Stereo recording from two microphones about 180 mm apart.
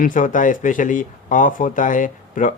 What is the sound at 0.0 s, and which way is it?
Speech, 45° left (ahead or behind).